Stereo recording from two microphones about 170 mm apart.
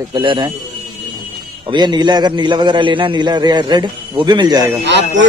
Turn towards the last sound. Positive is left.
turn(degrees=-90)